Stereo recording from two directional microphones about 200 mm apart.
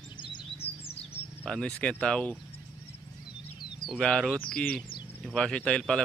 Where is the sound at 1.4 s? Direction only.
5° left (ahead or behind).